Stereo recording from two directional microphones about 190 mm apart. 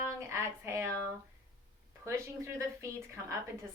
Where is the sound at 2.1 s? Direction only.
15° right (ahead or behind).